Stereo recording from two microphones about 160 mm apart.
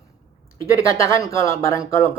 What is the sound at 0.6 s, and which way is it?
Speech, 20° left (ahead or behind).